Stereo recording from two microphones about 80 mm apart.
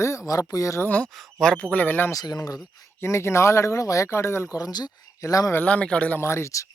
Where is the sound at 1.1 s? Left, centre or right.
Centre; by 2.0 s left.